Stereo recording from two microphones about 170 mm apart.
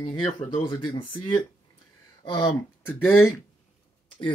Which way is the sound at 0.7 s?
25° left (ahead or behind).